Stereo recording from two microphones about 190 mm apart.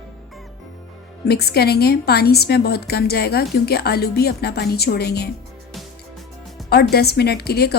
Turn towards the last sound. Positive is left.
turn(degrees=55)  # may be behind; listen again after turning